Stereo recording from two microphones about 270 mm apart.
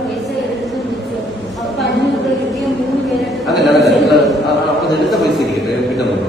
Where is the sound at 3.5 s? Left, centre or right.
Centre.